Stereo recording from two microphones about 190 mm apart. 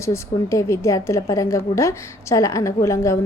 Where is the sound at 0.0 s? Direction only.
15° left (ahead or behind).